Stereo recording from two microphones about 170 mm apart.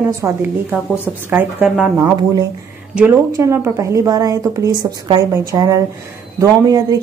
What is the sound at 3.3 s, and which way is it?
A woman's voice, 15° right (ahead or behind).